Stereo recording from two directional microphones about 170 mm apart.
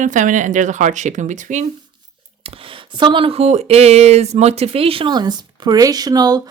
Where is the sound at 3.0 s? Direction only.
30° right (ahead or behind).